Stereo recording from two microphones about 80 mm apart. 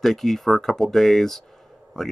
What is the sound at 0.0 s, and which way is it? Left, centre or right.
Speech, centre.